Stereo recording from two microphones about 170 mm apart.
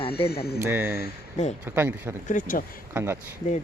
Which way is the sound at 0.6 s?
10° right (ahead or behind).